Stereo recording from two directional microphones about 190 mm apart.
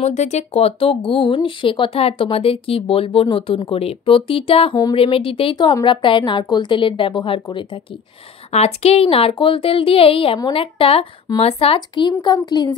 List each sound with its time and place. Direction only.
0.0 s speech: 35° left (ahead or behind)